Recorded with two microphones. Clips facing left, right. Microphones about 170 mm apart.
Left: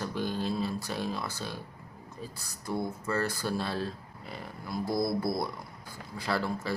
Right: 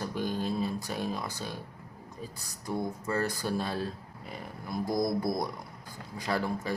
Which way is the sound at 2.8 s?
15° right (ahead or behind).